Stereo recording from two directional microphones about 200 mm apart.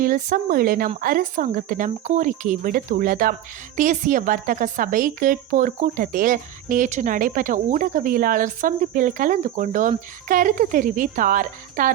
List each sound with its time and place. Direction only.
0.0 s a woman's voice: 40° right (ahead or behind)